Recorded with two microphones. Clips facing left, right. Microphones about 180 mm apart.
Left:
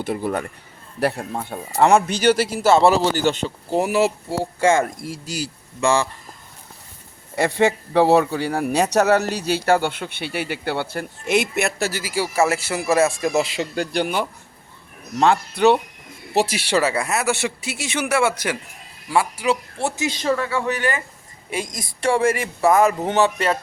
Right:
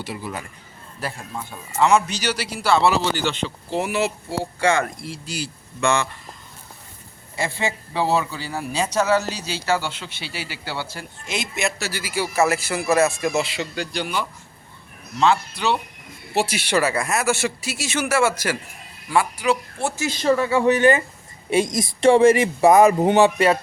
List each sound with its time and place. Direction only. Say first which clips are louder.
0.0 s a man's voice: left 7 dB; 50° left (ahead or behind)
0.9 s a man's voice: left 9 dB; 65° left (ahead or behind)
1.3 s a man's voice: left 5 dB; 50° left (ahead or behind); by 6.1 s 30° left (ahead or behind)
7.3 s a man's voice: left 7 dB; 60° left (ahead or behind)
16.3 s a man's voice: left 2 dB; 35° left (ahead or behind); by 18.0 s 20° left (ahead or behind)
19.1 s a man's voice: even; 25° left (ahead or behind)
20.2 s speech: right 5 dB; 10° right (ahead or behind)